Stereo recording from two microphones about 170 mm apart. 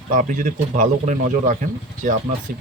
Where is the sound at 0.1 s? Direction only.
50° right (ahead or behind).